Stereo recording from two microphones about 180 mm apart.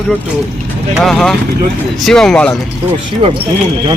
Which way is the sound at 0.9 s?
Centre (ahead or behind).